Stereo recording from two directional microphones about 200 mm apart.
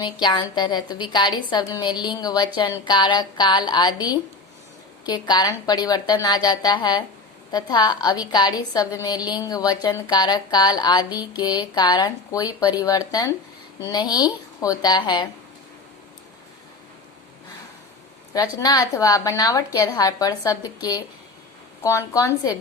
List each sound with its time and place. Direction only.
0.0 s a woman's voice: 20° left (ahead or behind)
18.3 s a woman's voice: 20° left (ahead or behind)